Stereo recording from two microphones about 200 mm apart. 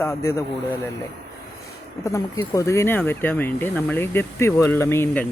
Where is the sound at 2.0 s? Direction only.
15° left (ahead or behind).